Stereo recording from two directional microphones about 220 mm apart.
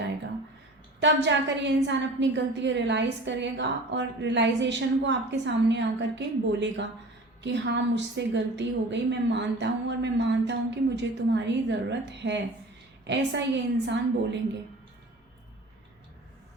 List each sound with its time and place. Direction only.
0.9 s a woman's voice: 55° right (ahead or behind)